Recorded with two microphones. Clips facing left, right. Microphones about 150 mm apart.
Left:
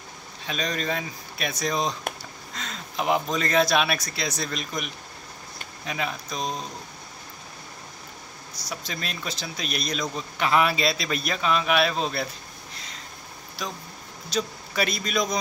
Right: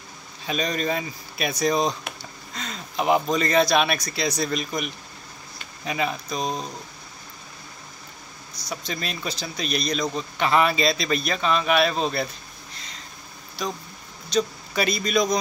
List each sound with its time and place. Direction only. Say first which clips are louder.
0.5 s speech: right 3 dB; 5° right (ahead or behind)
8.6 s speech: right 3 dB; centre (ahead or behind)
13.6 s a man's voice: right 4 dB; centre (ahead or behind)